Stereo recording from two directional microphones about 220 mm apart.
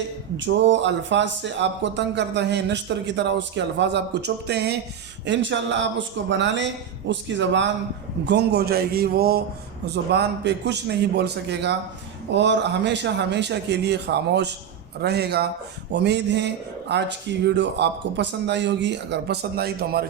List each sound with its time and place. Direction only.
0.3 s speech: 55° right (ahead or behind)